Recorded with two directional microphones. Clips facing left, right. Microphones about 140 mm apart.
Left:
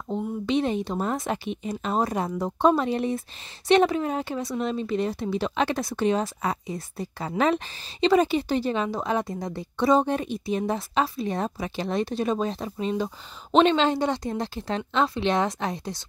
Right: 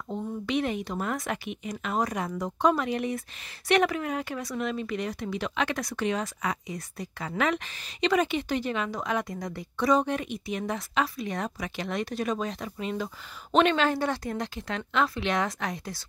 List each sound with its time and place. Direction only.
0.1 s a woman's voice: 25° left (ahead or behind)